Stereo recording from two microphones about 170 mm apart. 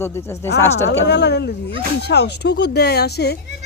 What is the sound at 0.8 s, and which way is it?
Speech, 80° left.